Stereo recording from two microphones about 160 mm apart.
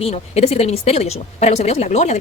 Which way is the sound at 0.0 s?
40° left (ahead or behind).